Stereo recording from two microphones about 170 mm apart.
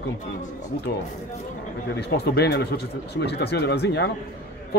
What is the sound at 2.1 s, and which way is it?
Speech, 75° left (ahead or behind).